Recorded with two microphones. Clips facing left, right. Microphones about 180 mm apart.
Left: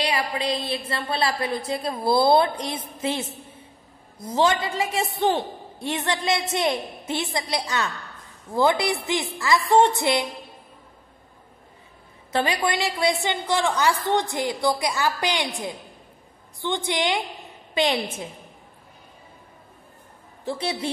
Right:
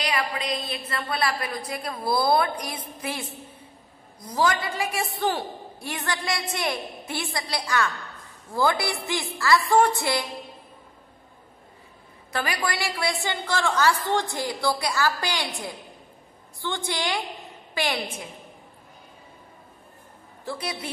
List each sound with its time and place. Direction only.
0.0 s a woman's voice: 25° left (ahead or behind)
12.3 s a woman's voice: 25° left (ahead or behind)
16.6 s a woman's voice: 20° left (ahead or behind)
20.4 s a woman's voice: 25° left (ahead or behind)